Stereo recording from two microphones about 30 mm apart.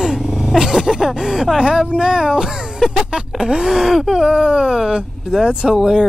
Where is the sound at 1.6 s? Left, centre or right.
Right.